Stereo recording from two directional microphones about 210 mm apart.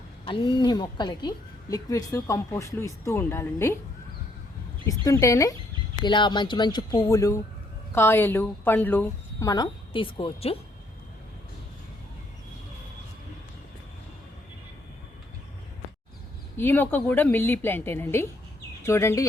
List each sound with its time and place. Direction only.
0.3 s speech: 20° left (ahead or behind)
4.9 s speech: 15° left (ahead or behind)
16.6 s speech: 10° left (ahead or behind)